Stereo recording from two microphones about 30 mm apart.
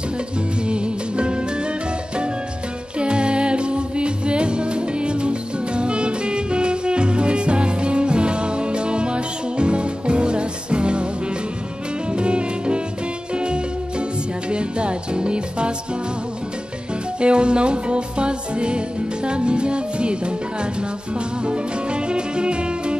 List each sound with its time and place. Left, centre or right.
0.7 s music: right
3.0 s music: right
12.1 s music: right
17.2 s music: right
21.5 s music: right